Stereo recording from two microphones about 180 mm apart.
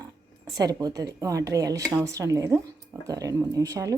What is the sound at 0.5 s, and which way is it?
A woman's voice, 20° right (ahead or behind).